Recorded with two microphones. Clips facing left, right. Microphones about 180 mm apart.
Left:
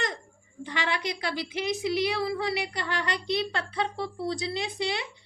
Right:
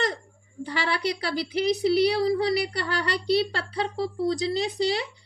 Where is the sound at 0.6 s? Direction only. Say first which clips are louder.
Right 3 dB; 35° right (ahead or behind).